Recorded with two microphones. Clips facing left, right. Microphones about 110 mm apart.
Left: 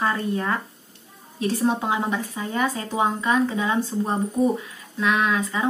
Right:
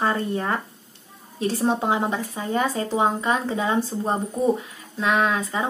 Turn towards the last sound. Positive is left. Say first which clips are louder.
# even
turn(degrees=-30)  # may be behind; listen again after turning